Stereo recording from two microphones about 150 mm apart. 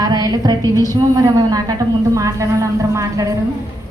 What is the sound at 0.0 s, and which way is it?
A woman's voice, 25° right (ahead or behind).